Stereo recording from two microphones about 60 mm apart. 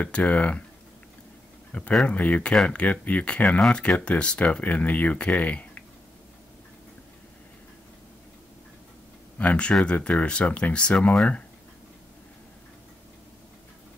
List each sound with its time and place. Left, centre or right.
0.0 s speech: left
1.7 s speech: centre
9.4 s speech: left